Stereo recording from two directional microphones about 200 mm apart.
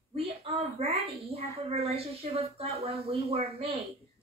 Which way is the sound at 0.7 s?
30° right (ahead or behind).